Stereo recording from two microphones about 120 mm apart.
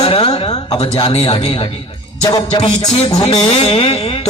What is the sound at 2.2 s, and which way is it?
Music, 35° left (ahead or behind).